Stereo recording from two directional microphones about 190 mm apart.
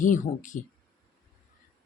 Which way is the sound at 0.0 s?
45° left (ahead or behind).